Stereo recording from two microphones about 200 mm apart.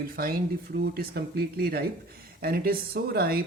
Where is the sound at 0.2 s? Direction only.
50° right (ahead or behind).